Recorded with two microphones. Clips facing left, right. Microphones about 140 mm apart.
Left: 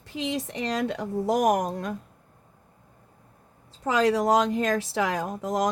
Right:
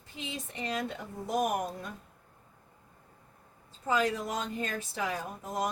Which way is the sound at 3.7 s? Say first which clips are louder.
Left 6 dB; 90° left.